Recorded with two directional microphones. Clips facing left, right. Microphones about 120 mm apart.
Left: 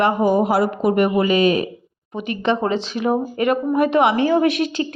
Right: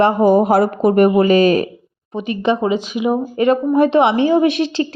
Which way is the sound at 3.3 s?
25° right (ahead or behind).